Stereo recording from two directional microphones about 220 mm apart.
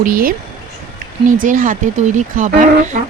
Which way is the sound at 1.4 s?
35° right (ahead or behind).